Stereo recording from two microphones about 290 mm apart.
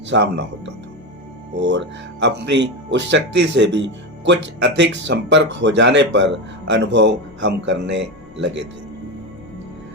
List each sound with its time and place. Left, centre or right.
0.1 s speech: right